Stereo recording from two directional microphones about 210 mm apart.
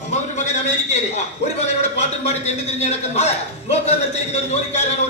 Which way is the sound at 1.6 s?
30° left (ahead or behind).